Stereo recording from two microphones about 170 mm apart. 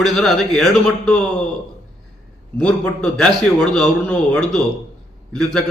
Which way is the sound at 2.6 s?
5° left (ahead or behind).